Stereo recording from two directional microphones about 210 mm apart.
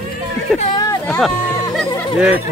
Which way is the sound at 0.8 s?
15° left (ahead or behind).